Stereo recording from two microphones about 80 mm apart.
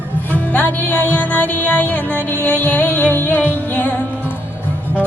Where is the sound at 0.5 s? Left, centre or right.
Centre.